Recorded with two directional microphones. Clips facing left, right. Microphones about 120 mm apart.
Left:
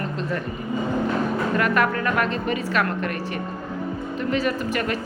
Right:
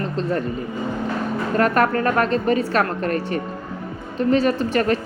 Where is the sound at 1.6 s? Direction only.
40° right (ahead or behind).